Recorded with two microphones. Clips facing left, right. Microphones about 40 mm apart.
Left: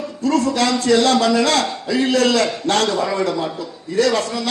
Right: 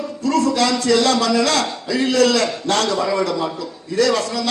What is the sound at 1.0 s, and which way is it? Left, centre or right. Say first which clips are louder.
A man's voice: left 1 dB; left.